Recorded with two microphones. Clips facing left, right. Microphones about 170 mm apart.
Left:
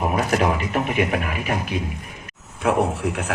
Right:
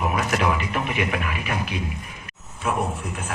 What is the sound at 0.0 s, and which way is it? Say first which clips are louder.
Speech: left 3 dB; 40° left (ahead or behind).